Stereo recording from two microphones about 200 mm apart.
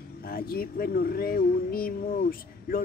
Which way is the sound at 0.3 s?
50° left (ahead or behind).